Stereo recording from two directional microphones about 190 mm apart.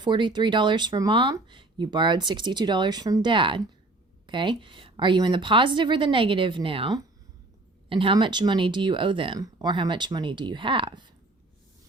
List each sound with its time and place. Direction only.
0.0 s speech: 25° right (ahead or behind)